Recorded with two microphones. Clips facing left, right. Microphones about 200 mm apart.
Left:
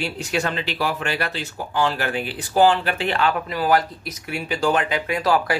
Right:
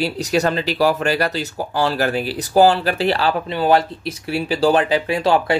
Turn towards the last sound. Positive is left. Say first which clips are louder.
# right 4 dB
turn(degrees=-25)  # may be behind; listen again after turning